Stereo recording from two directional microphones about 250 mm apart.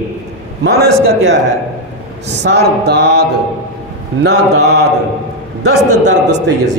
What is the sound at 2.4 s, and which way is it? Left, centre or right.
Music, right.